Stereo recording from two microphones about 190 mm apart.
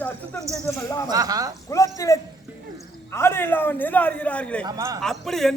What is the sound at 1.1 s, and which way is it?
Speech, 20° right (ahead or behind).